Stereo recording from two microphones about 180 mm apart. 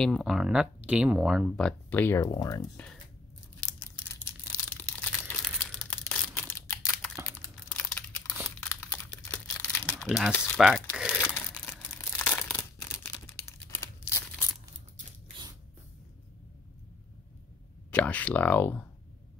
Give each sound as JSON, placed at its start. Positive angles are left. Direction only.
{"t": 0.0, "sound": "speech", "side_deg": 0}
{"t": 3.6, "sound": "crumpling", "side_deg": 10}
{"t": 7.3, "sound": "computer keyboard", "side_deg": 10}
{"t": 8.5, "sound": "crumpling", "side_deg": 5}
{"t": 10.3, "sound": "speech", "side_deg": 10}
{"t": 10.6, "sound": "speech", "side_deg": 0}
{"t": 11.1, "sound": "tearing", "side_deg": 10}
{"t": 17.9, "sound": "speech", "side_deg": 10}